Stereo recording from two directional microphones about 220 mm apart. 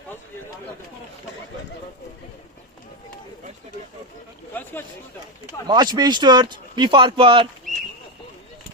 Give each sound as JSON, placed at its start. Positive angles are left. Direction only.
{"t": 5.6, "sound": "speech", "side_deg": -20}